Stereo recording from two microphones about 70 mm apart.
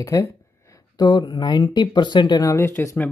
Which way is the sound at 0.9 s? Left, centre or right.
Left.